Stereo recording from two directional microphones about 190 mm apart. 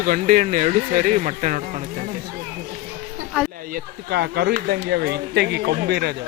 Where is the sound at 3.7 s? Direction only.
55° right (ahead or behind).